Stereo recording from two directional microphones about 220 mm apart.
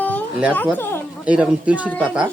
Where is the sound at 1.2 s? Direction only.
5° right (ahead or behind).